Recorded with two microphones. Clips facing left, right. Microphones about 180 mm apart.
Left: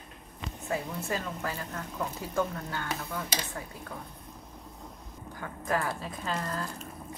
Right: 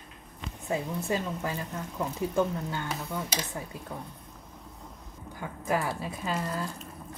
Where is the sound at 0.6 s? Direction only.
20° right (ahead or behind).